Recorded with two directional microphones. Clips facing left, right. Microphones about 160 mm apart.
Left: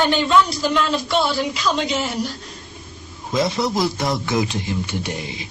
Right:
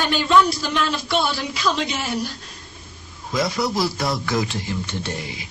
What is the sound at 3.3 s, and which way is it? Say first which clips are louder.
A man's voice: left 2 dB; 25° left (ahead or behind).